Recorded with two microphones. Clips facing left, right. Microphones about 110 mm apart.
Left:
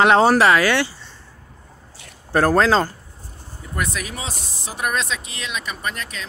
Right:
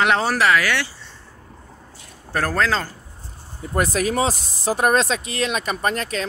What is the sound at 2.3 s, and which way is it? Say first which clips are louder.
Speech: left 5 dB; 25° left (ahead or behind).